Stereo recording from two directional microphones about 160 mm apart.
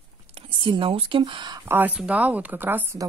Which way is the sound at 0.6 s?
35° right (ahead or behind).